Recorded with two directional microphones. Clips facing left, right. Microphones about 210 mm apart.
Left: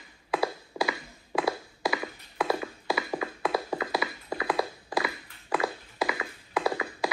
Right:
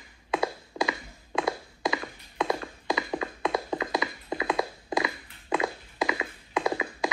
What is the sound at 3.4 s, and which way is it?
Music, 20° right (ahead or behind).